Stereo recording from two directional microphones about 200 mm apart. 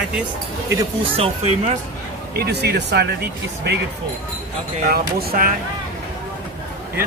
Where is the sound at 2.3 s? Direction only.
55° right (ahead or behind).